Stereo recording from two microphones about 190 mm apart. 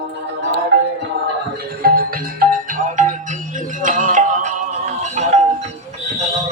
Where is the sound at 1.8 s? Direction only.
50° right (ahead or behind).